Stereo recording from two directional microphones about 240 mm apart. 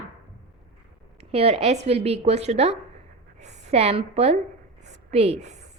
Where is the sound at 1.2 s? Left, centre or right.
Right.